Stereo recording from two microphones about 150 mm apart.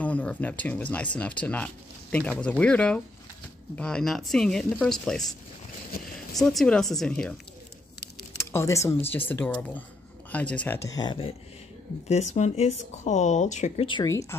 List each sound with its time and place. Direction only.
0.0 s speech: 10° left (ahead or behind)
6.3 s speech: centre (ahead or behind)
8.5 s speech: 20° left (ahead or behind)
10.8 s speech: 25° left (ahead or behind)
12.1 s speech: 50° left (ahead or behind)